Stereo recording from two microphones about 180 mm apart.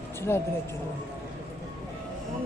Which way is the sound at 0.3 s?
10° left (ahead or behind).